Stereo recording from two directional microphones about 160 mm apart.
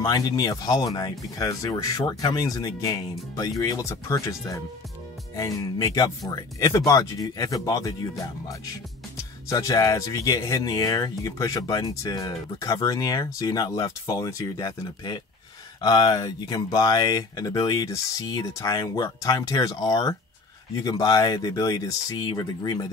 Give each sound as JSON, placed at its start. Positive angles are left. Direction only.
{"t": 0.0, "sound": "speech", "side_deg": 25}
{"t": 9.5, "sound": "speech", "side_deg": 20}